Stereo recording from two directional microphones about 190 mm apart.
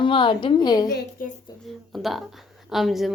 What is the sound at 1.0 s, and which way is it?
Speech, 45° left (ahead or behind).